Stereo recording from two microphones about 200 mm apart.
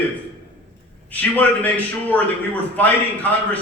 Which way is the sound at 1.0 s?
10° left (ahead or behind).